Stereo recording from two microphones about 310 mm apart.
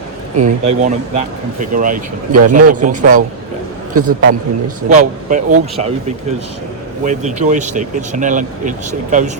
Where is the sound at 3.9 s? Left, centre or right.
Right.